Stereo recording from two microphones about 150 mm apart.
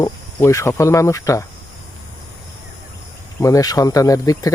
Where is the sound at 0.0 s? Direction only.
20° left (ahead or behind).